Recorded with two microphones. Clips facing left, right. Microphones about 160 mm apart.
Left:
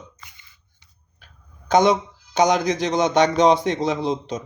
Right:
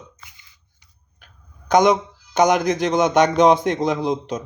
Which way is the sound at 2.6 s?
Centre (ahead or behind).